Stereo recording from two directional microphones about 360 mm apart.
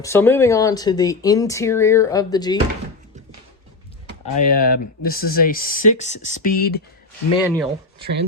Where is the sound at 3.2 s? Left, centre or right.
Centre.